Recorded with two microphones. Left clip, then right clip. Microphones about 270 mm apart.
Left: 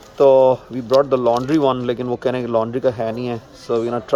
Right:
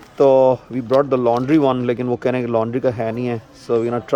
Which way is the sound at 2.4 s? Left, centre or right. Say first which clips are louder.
Even; right.